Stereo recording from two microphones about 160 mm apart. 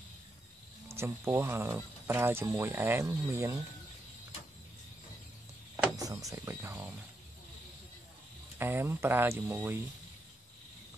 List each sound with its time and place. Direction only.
0.8 s speech: 15° right (ahead or behind)
5.9 s speech: 20° right (ahead or behind)
8.5 s speech: 15° right (ahead or behind)